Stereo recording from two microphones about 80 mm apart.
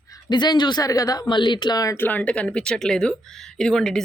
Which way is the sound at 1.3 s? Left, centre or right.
Left.